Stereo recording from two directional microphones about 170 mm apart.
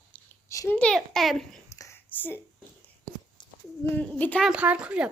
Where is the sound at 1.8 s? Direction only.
15° left (ahead or behind).